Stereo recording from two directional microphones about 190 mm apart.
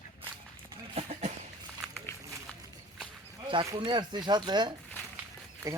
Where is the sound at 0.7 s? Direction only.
35° right (ahead or behind).